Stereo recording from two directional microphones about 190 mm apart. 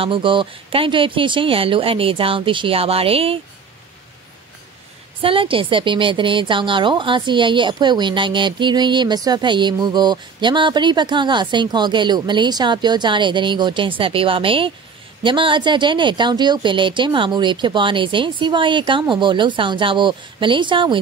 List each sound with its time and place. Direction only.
0.0 s a woman's voice: 25° right (ahead or behind)
5.2 s a woman's voice: 30° right (ahead or behind)